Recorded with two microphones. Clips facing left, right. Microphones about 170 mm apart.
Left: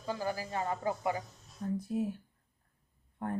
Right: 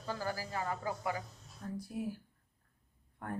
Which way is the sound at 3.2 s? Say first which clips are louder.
Left 5 dB; 25° left (ahead or behind).